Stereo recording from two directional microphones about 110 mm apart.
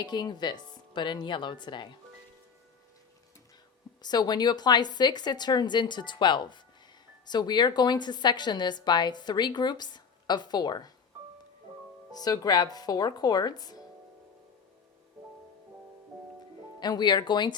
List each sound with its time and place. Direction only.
0.0 s speech: 40° left (ahead or behind)
4.0 s a woman's voice: 40° left (ahead or behind)
12.1 s a woman's voice: 35° left (ahead or behind)
16.8 s a woman's voice: 40° left (ahead or behind)